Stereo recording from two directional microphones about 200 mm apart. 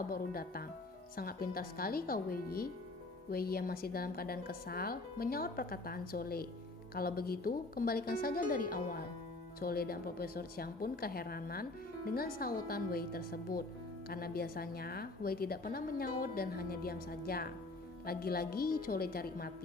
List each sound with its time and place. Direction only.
0.1 s a woman's voice: 50° left (ahead or behind)